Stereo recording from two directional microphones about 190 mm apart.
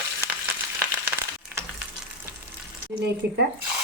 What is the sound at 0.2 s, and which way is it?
Frying, 15° right (ahead or behind).